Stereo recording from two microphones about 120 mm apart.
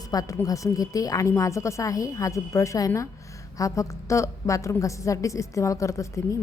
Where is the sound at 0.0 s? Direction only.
30° left (ahead or behind).